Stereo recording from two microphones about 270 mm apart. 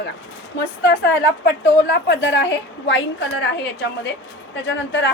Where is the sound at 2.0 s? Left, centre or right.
Left.